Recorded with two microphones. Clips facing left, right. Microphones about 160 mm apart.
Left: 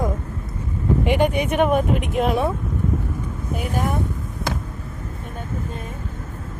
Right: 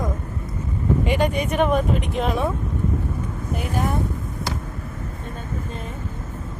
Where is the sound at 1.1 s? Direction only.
10° left (ahead or behind).